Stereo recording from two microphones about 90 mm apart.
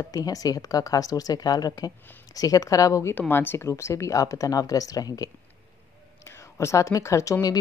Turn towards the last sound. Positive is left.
turn(degrees=40)  # may be behind; listen again after turning